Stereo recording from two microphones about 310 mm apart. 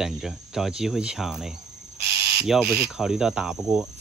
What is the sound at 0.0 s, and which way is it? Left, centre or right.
Speech, centre.